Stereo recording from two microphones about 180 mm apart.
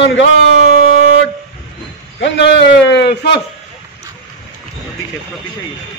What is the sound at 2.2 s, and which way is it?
A man's voice, 80° left.